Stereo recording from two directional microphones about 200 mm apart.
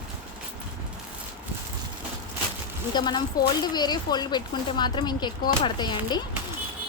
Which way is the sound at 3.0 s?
20° left (ahead or behind).